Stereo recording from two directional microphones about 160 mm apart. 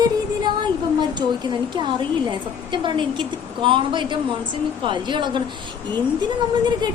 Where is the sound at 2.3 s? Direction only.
30° right (ahead or behind).